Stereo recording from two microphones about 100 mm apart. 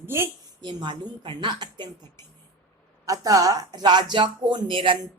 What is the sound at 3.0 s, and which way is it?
Speech, 35° right (ahead or behind).